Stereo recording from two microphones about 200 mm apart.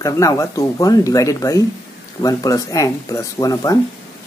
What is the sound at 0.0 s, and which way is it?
Speech, 15° left (ahead or behind).